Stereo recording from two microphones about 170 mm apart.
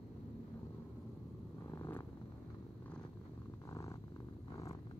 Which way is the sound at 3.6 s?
20° left (ahead or behind).